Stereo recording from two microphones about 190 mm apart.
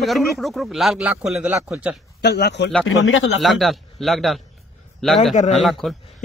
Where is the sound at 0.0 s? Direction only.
Centre (ahead or behind).